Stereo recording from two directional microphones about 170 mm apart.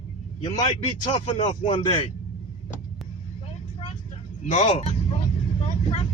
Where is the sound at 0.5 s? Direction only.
25° left (ahead or behind).